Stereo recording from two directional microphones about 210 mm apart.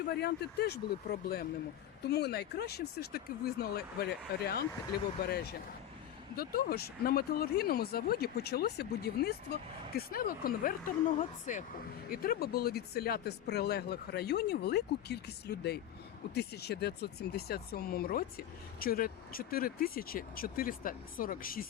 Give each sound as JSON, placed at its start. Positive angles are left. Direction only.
{"t": 0.1, "sound": "speech", "side_deg": 50}